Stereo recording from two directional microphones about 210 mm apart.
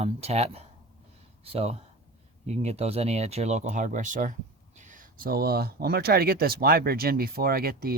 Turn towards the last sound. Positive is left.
turn(degrees=-45)  # may be behind; listen again after turning